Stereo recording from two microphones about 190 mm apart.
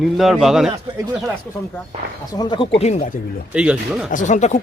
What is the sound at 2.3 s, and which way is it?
Speech, 20° left (ahead or behind).